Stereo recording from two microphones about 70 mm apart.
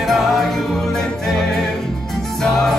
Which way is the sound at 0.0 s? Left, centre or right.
Centre.